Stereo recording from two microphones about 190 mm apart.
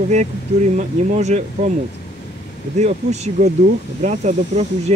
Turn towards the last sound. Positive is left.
turn(degrees=-35)  # may be behind; listen again after turning